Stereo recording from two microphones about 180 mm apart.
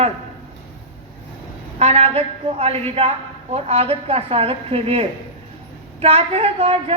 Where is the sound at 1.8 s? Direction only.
35° right (ahead or behind).